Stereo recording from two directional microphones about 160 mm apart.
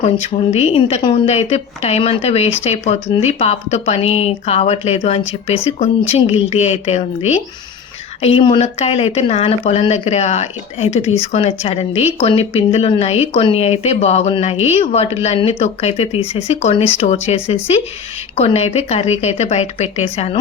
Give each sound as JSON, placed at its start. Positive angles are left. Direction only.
{"t": 0.5, "sound": "a woman's voice", "side_deg": 35}